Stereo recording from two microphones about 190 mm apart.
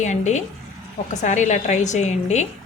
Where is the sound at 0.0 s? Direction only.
40° left (ahead or behind).